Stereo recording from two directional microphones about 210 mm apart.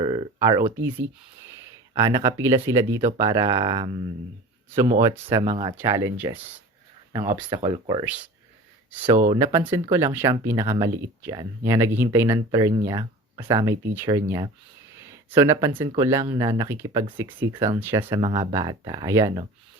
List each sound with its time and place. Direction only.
0.0 s a sound: 20° right (ahead or behind)
2.0 s speech: 20° right (ahead or behind)
5.7 s speech: 15° right (ahead or behind)
15.7 s speech: 25° right (ahead or behind)
16.0 s speech: 15° right (ahead or behind)